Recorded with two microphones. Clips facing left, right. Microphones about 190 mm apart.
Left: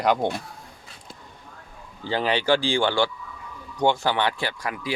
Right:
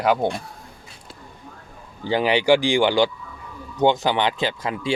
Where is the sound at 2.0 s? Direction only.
15° right (ahead or behind).